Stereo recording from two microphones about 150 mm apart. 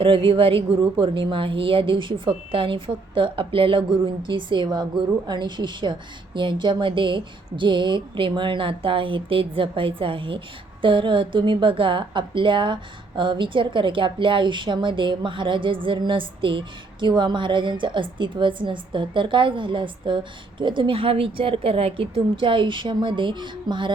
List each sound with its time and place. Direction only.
0.0 s a woman's voice: 35° right (ahead or behind)